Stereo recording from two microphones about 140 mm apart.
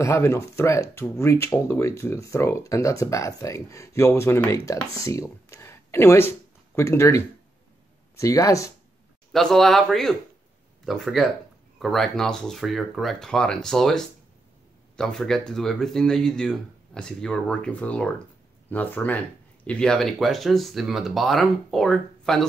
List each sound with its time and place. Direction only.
0.0 s speech: 20° left (ahead or behind)
9.3 s speech: 5° left (ahead or behind)